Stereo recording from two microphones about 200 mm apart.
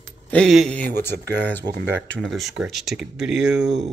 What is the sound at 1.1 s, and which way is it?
Speech, 55° right (ahead or behind).